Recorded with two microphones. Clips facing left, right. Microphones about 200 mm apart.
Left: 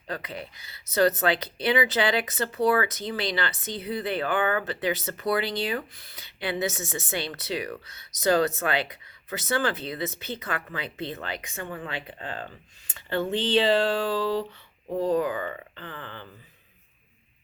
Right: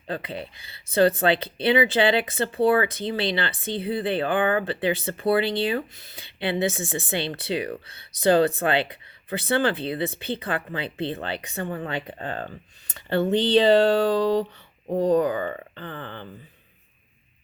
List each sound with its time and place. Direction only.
0.1 s speech: 30° right (ahead or behind)